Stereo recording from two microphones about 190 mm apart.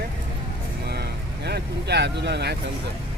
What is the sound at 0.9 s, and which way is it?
Vehicle, 60° right (ahead or behind).